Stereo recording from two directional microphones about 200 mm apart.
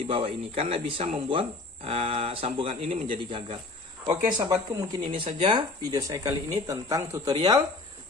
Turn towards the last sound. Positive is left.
turn(degrees=-20)  # may be behind; listen again after turning